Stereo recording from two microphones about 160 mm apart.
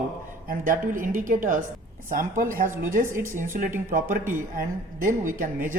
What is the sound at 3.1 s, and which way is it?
Speech, 15° right (ahead or behind).